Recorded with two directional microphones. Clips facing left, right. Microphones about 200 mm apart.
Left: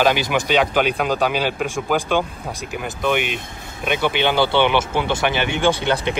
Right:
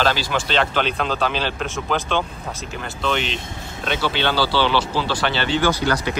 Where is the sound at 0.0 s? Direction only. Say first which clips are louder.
Left 3 dB; 15° left (ahead or behind).